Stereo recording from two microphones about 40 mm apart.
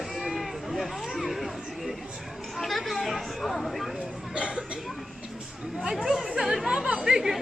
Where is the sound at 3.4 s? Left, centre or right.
Centre.